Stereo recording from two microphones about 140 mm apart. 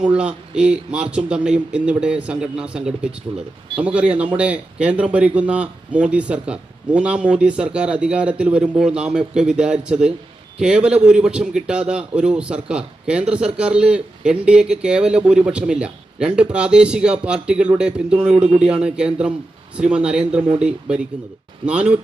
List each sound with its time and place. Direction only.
0.0 s a man's voice: 10° right (ahead or behind)